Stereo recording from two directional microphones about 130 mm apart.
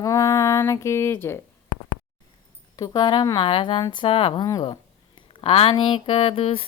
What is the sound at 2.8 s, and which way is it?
Speech, 35° left (ahead or behind).